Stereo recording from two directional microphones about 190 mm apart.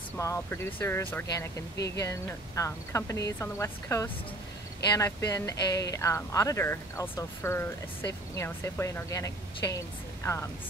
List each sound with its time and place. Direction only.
0.2 s speech: 15° left (ahead or behind)